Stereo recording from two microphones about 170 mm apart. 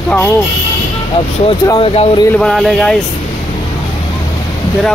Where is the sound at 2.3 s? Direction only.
Centre (ahead or behind).